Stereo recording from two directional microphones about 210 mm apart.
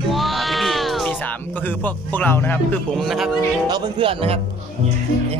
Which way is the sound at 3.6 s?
20° right (ahead or behind).